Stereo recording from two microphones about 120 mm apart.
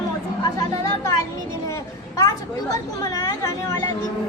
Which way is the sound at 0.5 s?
30° left (ahead or behind).